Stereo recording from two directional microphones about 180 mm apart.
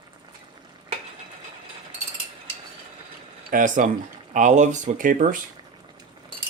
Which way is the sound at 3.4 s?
45° right (ahead or behind).